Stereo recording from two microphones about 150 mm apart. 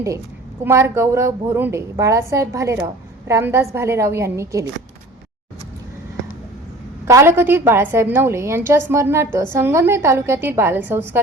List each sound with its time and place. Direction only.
0.6 s a woman's voice: 15° right (ahead or behind)
7.0 s a woman's voice: 20° right (ahead or behind)